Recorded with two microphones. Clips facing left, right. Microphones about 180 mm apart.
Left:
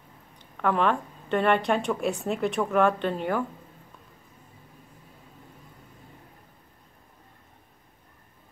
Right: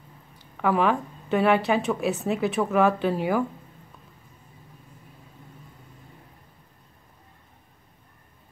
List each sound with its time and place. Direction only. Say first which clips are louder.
0.4 s a woman's voice: right 2 dB; 5° right (ahead or behind)